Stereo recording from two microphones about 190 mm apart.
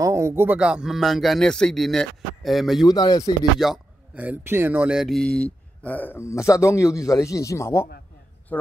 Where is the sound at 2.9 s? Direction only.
20° left (ahead or behind).